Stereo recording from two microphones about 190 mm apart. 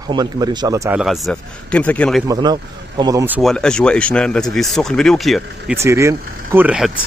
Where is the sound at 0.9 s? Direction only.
Centre (ahead or behind).